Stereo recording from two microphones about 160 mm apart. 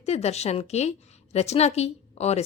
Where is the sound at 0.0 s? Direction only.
40° left (ahead or behind).